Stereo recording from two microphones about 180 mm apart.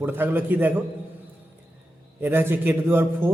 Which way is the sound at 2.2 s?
10° right (ahead or behind).